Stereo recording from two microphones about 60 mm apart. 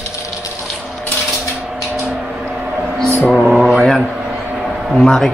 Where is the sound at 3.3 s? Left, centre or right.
Centre.